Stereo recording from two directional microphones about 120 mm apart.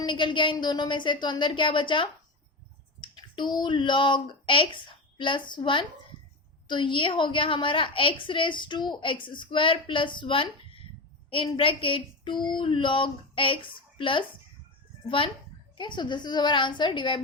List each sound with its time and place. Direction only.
0.0 s a woman's voice: 40° left (ahead or behind)
15.8 s a woman's voice: 40° left (ahead or behind)